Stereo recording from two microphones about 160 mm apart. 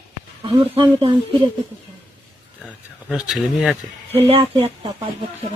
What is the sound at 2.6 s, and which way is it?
Speech, 5° right (ahead or behind).